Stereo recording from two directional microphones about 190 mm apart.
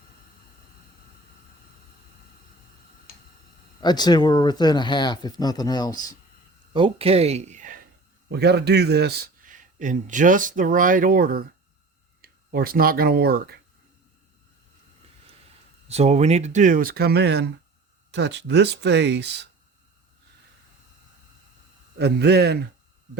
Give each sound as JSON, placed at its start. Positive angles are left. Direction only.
{"t": 3.8, "sound": "speech", "side_deg": 20}
{"t": 6.7, "sound": "speech", "side_deg": -30}
{"t": 8.3, "sound": "speech", "side_deg": -60}
{"t": 15.9, "sound": "speech", "side_deg": -35}
{"t": 21.9, "sound": "speech", "side_deg": -60}